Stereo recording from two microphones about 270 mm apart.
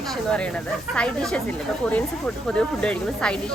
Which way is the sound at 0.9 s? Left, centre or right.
Centre.